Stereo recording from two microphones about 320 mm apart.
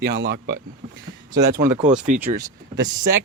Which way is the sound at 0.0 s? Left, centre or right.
Right.